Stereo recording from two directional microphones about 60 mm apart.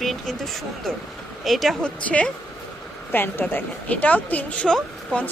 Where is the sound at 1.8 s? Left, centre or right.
Centre.